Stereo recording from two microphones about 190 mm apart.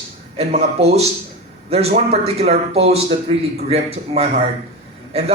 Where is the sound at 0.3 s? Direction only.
35° right (ahead or behind).